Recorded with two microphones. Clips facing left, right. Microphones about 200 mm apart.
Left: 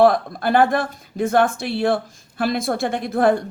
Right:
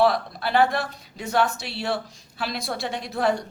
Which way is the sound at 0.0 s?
50° left (ahead or behind).